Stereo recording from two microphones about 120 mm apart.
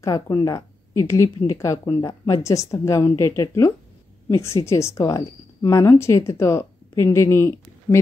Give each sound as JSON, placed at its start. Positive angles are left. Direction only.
{"t": 0.0, "sound": "a woman's voice", "side_deg": 30}